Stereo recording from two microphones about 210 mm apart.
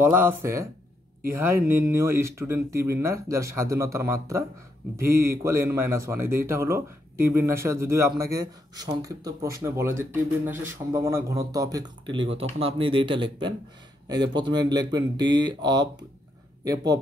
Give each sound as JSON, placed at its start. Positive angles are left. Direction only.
{"t": 0.0, "sound": "speech", "side_deg": -10}